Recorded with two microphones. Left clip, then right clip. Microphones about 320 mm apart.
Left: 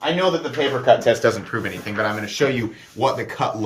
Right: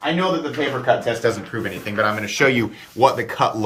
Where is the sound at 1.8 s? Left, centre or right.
Centre.